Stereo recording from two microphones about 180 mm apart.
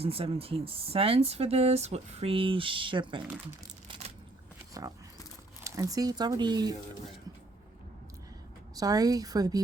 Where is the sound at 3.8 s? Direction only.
35° right (ahead or behind).